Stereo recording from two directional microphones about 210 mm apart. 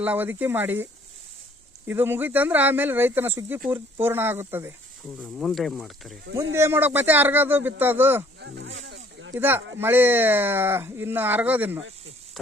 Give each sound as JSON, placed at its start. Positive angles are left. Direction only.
{"t": 0.0, "sound": "speech", "side_deg": -10}
{"t": 1.9, "sound": "speech", "side_deg": -10}
{"t": 5.4, "sound": "speech", "side_deg": 0}
{"t": 6.6, "sound": "speech", "side_deg": -10}
{"t": 8.4, "sound": "a sound", "side_deg": -60}
{"t": 9.3, "sound": "speech", "side_deg": -10}
{"t": 11.8, "sound": "speech", "side_deg": -65}